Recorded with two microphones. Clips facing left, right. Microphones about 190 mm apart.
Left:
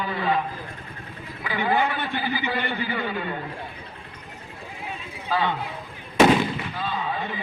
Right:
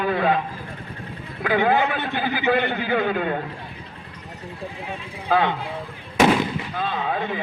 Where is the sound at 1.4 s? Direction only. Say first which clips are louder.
Right 4 dB; 60° right (ahead or behind).